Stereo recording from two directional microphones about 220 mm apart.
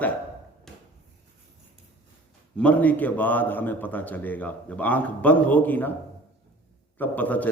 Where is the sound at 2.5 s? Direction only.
5° left (ahead or behind).